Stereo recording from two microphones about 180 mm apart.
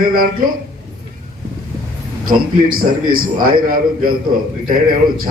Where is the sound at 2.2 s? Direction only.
55° right (ahead or behind).